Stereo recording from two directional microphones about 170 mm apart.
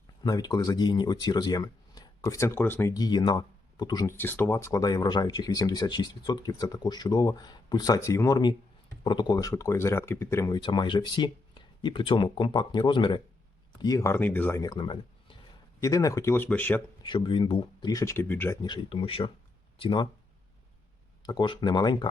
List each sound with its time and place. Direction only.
0.3 s speech: 20° left (ahead or behind)
10.6 s speech: 25° left (ahead or behind); by 14.6 s 10° left (ahead or behind)
14.6 s speech: 25° left (ahead or behind); by 16.8 s 10° left (ahead or behind)
17.0 s speech: 30° left (ahead or behind); by 18.6 s 15° left (ahead or behind)
18.6 s speech: 25° left (ahead or behind)
21.2 s speech: 25° left (ahead or behind)